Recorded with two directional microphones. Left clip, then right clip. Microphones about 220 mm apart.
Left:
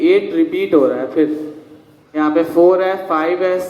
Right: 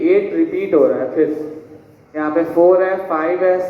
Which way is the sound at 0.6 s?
65° left (ahead or behind).